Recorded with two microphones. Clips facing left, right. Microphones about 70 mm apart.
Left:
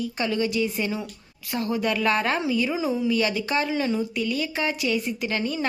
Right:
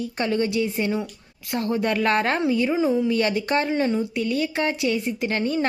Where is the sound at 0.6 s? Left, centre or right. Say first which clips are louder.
Right 3 dB; right.